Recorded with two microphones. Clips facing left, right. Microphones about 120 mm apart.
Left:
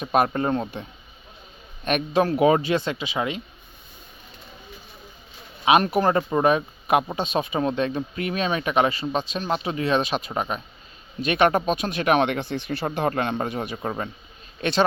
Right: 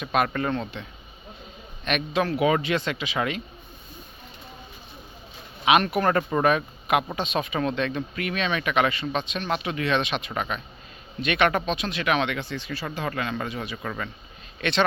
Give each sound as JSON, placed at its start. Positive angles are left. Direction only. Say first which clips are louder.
{"t": 0.0, "sound": "speech", "louder": "left 3 dB", "side_deg": 35}
{"t": 1.8, "sound": "speech", "louder": "left 4 dB", "side_deg": 40}
{"t": 5.6, "sound": "speech", "louder": "left 2 dB", "side_deg": 35}
{"t": 13.8, "sound": "a man's voice", "louder": "left 4 dB", "side_deg": 35}